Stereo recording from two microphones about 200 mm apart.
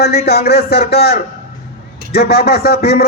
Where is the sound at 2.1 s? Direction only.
55° left (ahead or behind).